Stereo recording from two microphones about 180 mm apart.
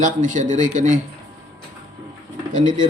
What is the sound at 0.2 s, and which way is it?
Speech, 45° right (ahead or behind).